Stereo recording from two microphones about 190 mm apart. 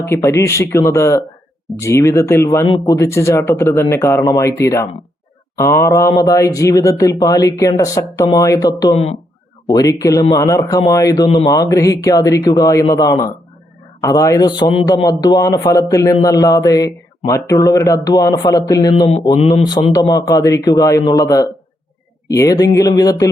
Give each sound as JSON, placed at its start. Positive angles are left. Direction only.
{"t": 0.0, "sound": "a man's voice", "side_deg": 15}